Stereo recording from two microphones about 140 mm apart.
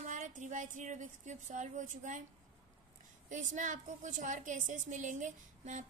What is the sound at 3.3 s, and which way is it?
A woman's voice, 65° right (ahead or behind).